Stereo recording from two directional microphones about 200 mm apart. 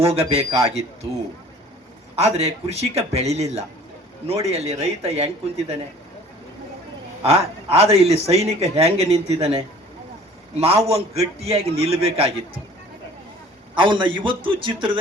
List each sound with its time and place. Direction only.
0.0 s speech: 30° right (ahead or behind)
2.1 s speech: 30° right (ahead or behind)
7.3 s a man's voice: 30° right (ahead or behind)
13.7 s a man's voice: 25° right (ahead or behind)